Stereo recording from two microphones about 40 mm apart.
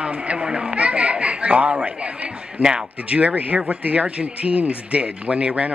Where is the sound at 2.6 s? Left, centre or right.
Centre.